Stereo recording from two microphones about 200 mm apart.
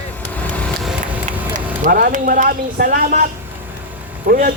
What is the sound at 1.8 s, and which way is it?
A man's voice, 45° right (ahead or behind).